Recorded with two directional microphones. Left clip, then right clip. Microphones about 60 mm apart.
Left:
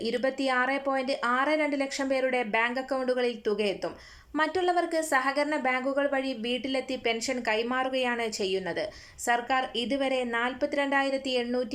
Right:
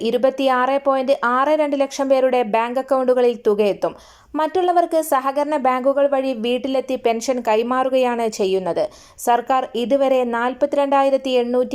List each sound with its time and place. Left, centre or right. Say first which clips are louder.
0.0 s speech: right 11 dB; right
4.4 s speech: right 9 dB; right